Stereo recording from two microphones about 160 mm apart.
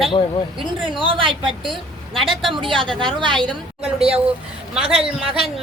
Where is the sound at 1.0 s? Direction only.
35° right (ahead or behind).